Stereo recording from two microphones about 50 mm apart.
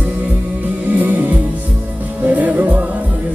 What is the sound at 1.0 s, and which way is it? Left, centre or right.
Music, right.